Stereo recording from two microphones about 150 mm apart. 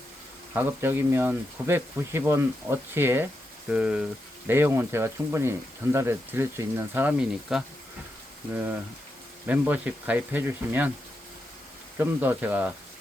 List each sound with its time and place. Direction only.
0.5 s speech: 15° right (ahead or behind)
9.5 s speech: 10° right (ahead or behind)
11.9 s speech: 15° right (ahead or behind)